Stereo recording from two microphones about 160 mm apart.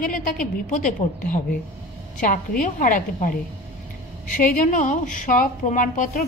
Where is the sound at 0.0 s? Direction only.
55° left (ahead or behind).